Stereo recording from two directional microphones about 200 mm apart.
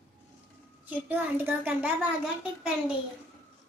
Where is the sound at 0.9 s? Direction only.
10° right (ahead or behind).